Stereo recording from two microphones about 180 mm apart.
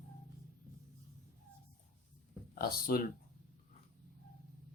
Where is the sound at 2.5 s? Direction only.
60° left (ahead or behind).